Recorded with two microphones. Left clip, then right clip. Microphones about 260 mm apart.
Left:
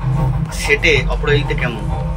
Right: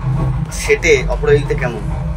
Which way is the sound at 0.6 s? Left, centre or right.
Right.